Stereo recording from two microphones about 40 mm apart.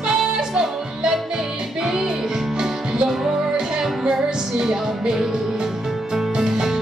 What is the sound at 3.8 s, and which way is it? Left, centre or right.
Music, centre.